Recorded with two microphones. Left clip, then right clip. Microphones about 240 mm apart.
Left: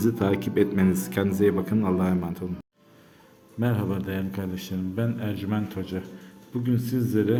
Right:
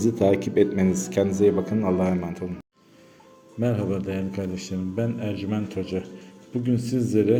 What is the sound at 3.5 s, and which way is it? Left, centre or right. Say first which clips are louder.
A man's voice: right 3 dB; centre.